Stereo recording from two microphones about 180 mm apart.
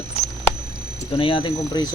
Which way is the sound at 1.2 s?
30° left (ahead or behind).